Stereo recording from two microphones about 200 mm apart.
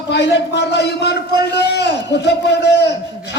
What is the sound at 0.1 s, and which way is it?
A man's voice, 60° left (ahead or behind).